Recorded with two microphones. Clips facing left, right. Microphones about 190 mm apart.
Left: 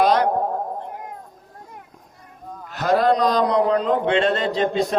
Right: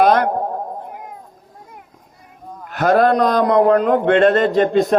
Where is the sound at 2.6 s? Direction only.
55° right (ahead or behind).